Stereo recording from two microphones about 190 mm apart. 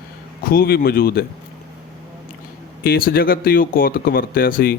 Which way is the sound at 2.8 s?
50° left (ahead or behind).